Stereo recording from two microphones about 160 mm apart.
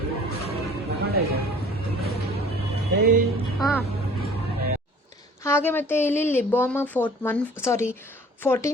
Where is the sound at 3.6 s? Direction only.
Centre (ahead or behind).